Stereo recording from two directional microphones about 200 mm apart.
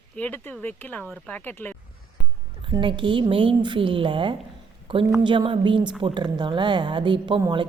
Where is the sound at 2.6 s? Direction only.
25° right (ahead or behind).